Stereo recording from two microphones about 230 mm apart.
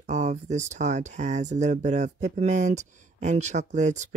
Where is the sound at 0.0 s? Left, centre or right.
Right.